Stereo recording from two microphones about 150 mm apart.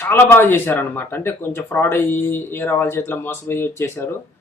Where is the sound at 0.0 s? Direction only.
15° left (ahead or behind).